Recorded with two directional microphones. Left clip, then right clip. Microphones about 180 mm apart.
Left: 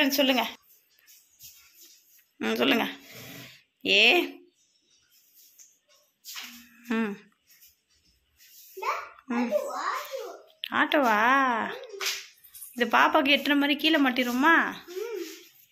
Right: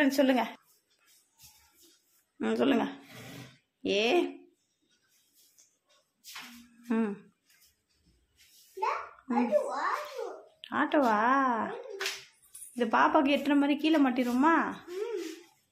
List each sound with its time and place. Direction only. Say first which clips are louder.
0.0 s a woman's voice: left 2 dB; 10° right (ahead or behind)
1.8 s a sound: left 7 dB; centre (ahead or behind)
6.6 s humming: left 2 dB; centre (ahead or behind)
9.3 s a child's voice: even; centre (ahead or behind)